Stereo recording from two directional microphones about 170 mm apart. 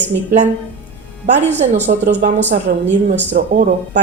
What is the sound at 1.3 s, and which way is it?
Speech, 40° right (ahead or behind).